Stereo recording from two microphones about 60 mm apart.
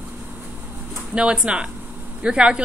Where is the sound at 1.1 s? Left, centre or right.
Centre.